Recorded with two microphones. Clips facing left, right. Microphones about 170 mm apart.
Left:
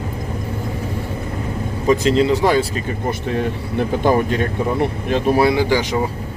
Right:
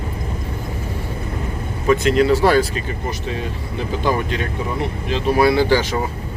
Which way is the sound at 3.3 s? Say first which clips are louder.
Left 5 dB; 55° left (ahead or behind).